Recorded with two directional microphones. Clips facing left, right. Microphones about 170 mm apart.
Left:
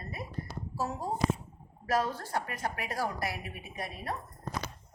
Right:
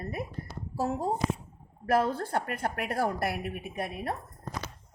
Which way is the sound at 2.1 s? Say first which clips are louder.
Right 4 dB; 55° right (ahead or behind).